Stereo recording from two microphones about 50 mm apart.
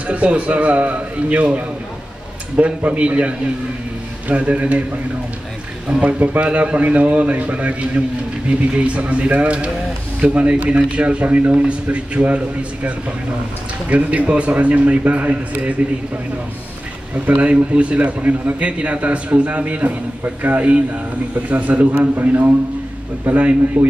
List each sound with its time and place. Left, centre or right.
0.0 s a man's voice: right
5.9 s a man's voice: right
13.8 s a man's voice: right
17.3 s a man's voice: right